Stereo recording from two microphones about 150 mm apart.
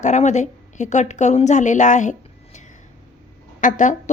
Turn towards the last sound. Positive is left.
turn(degrees=60)  # may be behind; listen again after turning